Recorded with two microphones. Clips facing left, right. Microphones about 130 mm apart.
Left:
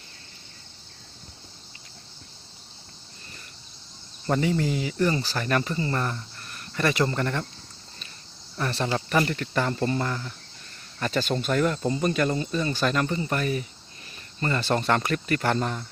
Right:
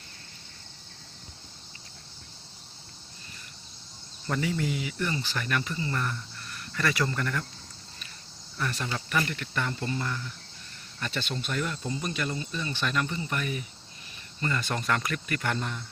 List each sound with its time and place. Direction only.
4.3 s speech: 30° left (ahead or behind)
6.7 s speech: 25° left (ahead or behind)
8.5 s speech: 35° left (ahead or behind); by 10.3 s 50° left (ahead or behind)
11.0 s speech: 40° left (ahead or behind)
13.3 s speech: 40° left (ahead or behind)
14.8 s speech: 35° left (ahead or behind)